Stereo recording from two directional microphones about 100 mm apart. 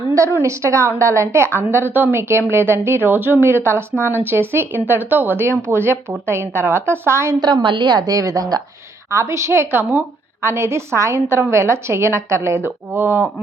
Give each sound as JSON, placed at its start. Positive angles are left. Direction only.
{"t": 0.3, "sound": "a woman's voice", "side_deg": -30}
{"t": 7.3, "sound": "a woman's voice", "side_deg": -45}